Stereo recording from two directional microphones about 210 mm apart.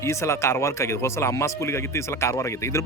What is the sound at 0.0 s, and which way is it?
Speech, 15° left (ahead or behind).